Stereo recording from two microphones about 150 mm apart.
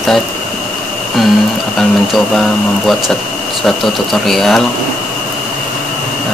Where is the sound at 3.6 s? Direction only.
Centre (ahead or behind).